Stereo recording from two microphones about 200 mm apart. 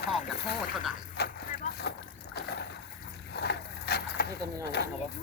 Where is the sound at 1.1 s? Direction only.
55° left (ahead or behind).